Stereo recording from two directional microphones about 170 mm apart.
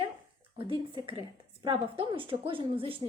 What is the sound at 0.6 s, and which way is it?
A woman's voice, 30° right (ahead or behind).